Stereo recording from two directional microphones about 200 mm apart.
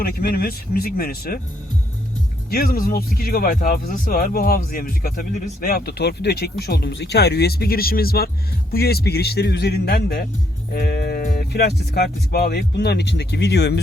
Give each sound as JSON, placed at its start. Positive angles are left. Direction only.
{"t": 0.0, "sound": "speech", "side_deg": 50}
{"t": 2.5, "sound": "speech", "side_deg": 50}